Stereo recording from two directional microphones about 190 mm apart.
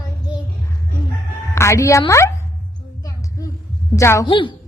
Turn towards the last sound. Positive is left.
turn(degrees=25)  # may be behind; listen again after turning